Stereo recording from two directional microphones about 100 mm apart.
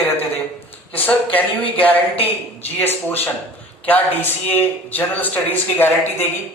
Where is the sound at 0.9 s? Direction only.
15° left (ahead or behind).